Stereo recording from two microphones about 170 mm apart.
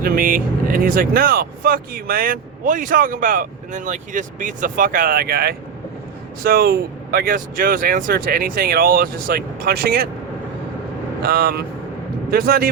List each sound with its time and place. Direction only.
0.0 s speech: 55° right (ahead or behind)
11.2 s speech: 65° right (ahead or behind)